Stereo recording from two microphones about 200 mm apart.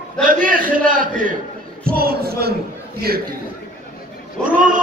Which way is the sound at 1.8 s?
50° right (ahead or behind).